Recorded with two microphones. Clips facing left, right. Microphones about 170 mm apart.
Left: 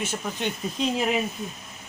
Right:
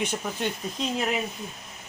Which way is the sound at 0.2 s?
Centre (ahead or behind).